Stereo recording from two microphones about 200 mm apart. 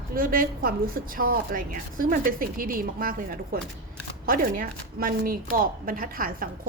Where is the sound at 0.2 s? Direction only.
45° right (ahead or behind).